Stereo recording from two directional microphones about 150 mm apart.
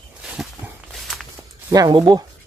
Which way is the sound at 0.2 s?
5° right (ahead or behind).